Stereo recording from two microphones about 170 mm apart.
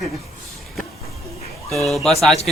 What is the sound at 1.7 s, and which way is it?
Speech, centre (ahead or behind).